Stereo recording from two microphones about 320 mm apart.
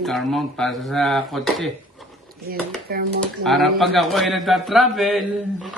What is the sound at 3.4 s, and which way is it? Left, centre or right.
A man's voice, centre.